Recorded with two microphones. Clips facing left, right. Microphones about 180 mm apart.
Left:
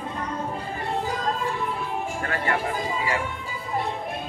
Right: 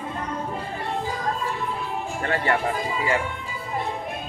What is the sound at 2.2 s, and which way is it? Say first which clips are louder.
Speech: right 5 dB; 30° right (ahead or behind).